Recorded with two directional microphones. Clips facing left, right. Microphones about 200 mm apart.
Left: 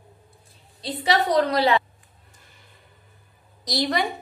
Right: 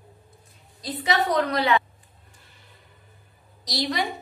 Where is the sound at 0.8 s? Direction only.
30° left (ahead or behind).